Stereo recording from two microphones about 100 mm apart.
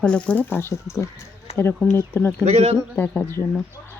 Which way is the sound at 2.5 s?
90° right.